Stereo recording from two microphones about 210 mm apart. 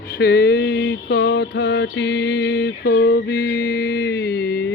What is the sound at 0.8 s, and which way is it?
Music, 50° left (ahead or behind).